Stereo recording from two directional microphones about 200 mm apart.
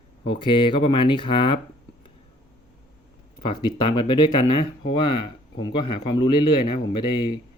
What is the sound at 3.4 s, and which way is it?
Speech, 25° left (ahead or behind).